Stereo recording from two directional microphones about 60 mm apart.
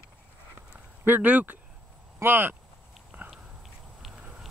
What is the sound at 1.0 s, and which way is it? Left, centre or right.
Speech, right.